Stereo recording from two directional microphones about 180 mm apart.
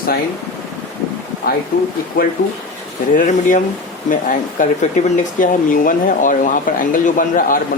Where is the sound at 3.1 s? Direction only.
50° left (ahead or behind).